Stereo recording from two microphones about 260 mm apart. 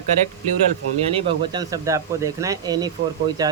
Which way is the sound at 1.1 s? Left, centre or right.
Centre.